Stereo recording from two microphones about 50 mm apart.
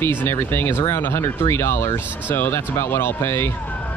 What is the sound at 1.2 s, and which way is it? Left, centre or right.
Speech, left.